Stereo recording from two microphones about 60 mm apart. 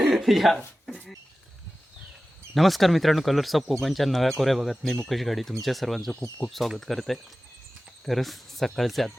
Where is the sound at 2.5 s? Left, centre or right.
Centre.